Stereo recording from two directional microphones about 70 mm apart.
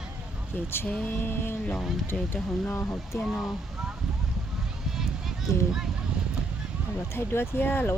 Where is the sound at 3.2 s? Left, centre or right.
Centre.